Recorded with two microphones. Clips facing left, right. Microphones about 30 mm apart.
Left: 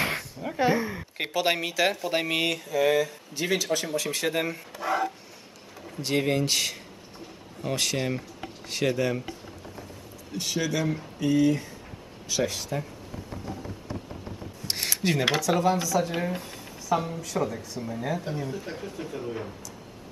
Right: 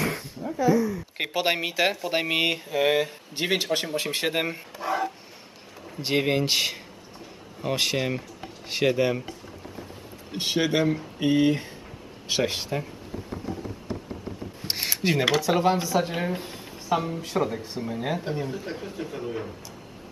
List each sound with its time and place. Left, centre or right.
0.0 s a sound: left
1.1 s a man's voice: centre; by 3.6 s right
3.6 s speech: right
3.9 s a man's voice: right
4.7 s speech: centre
5.9 s a man's voice: right
10.3 s a man's voice: right
13.3 s a sound: centre
14.7 s a sound: centre
15.4 s speech: right
16.3 s a sound: right
17.4 s a man's voice: right; by 19.5 s centre